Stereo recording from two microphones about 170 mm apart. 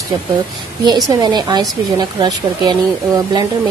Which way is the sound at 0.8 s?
25° right (ahead or behind).